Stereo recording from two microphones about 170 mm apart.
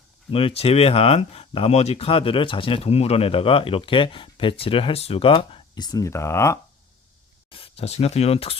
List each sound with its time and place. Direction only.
0.3 s speech: 35° left (ahead or behind); by 6.6 s 15° left (ahead or behind)
7.5 s speech: 35° left (ahead or behind)